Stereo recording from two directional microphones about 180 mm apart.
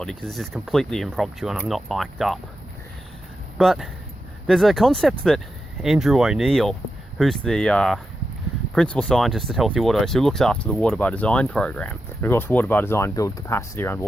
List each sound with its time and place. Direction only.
0.0 s speech: 5° left (ahead or behind)
3.6 s speech: centre (ahead or behind)